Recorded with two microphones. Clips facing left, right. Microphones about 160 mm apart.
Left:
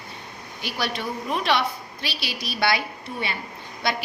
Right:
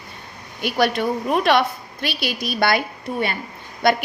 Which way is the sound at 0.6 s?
55° right (ahead or behind).